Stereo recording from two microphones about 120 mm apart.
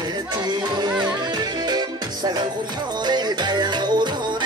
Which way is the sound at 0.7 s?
35° right (ahead or behind).